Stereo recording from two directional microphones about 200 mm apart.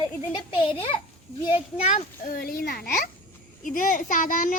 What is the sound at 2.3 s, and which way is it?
A child's voice, 45° left (ahead or behind).